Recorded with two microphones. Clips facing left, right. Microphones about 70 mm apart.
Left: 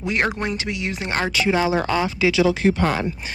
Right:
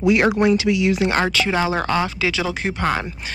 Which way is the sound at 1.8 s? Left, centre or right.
Right.